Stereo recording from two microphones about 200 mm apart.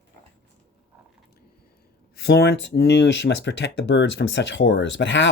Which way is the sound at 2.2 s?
55° left (ahead or behind).